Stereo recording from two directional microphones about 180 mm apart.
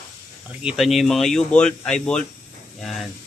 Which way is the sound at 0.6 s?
Centre (ahead or behind).